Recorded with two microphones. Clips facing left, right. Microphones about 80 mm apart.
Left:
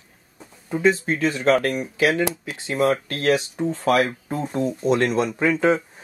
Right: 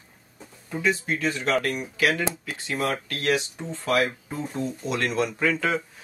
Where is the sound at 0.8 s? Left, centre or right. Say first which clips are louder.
Left 5 dB; left.